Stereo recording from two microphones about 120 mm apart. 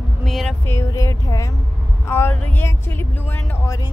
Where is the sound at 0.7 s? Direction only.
25° left (ahead or behind).